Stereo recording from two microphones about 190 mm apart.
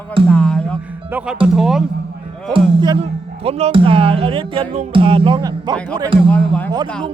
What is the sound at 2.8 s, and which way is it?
Speech, 25° right (ahead or behind).